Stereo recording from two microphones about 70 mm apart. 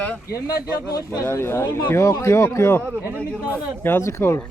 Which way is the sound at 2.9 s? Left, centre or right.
Right.